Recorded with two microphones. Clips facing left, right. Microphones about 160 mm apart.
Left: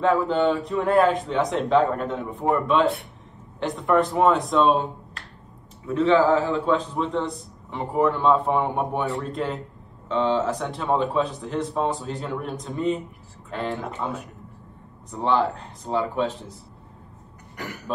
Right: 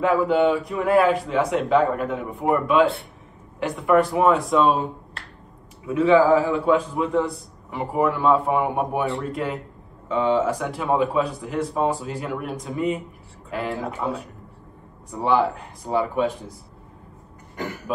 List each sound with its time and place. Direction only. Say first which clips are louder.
0.0 s speech: right 2 dB; 10° right (ahead or behind)
5.9 s speech: right 2 dB; 5° right (ahead or behind)
17.6 s cough: right 5 dB; 25° right (ahead or behind)